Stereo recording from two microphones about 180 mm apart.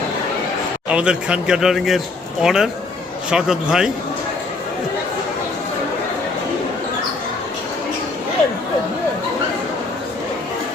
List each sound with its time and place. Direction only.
0.9 s a man's voice: 5° right (ahead or behind)